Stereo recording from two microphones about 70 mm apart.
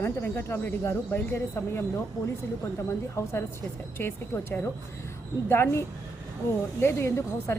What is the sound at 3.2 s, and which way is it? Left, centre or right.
Speech, left.